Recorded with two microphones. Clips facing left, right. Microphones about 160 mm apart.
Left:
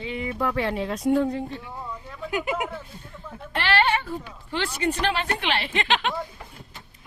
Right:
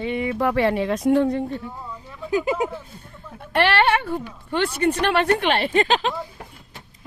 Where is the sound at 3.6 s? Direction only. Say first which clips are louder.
Right 5 dB; 65° right (ahead or behind); by 6.1 s 35° right (ahead or behind).